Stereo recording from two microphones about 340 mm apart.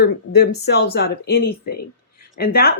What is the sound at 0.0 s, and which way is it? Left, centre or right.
Speech, left.